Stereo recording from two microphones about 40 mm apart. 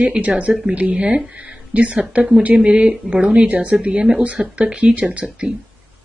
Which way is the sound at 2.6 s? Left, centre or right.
Right.